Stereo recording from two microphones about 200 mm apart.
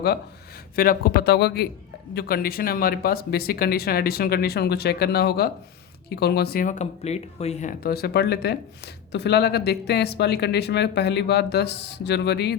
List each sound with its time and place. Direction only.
0.8 s speech: 50° left (ahead or behind)